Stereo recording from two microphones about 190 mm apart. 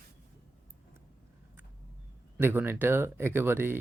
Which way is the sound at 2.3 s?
10° right (ahead or behind).